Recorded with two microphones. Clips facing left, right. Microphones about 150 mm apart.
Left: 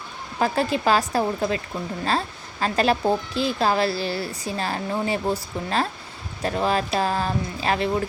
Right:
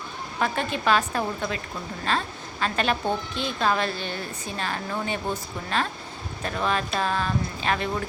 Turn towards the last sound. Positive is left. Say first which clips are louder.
# left 3 dB
turn(degrees=30)  # may be behind; listen again after turning